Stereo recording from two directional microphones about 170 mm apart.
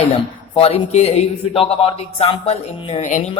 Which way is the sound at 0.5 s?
35° left (ahead or behind).